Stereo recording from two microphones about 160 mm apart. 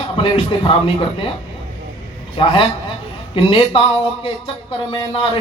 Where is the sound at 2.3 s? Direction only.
35° left (ahead or behind).